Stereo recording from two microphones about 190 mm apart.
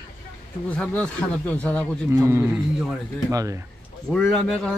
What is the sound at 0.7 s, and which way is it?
A man's voice, 5° left (ahead or behind).